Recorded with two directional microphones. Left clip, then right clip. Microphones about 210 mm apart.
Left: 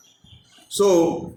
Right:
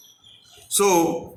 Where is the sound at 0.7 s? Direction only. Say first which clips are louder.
Left 1 dB; 30° right (ahead or behind).